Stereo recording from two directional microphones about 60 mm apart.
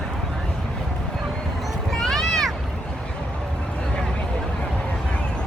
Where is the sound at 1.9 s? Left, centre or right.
Centre.